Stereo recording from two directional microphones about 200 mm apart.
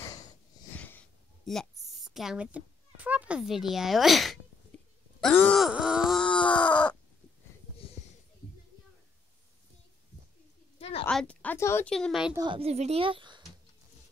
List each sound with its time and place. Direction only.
0.0 s wheeze: 20° left (ahead or behind)
0.7 s a woman's voice: 10° left (ahead or behind)
5.2 s groan: 5° left (ahead or behind)
10.8 s a sound: 30° left (ahead or behind)
11.1 s speech: 5° left (ahead or behind)
12.4 s speech: 25° right (ahead or behind)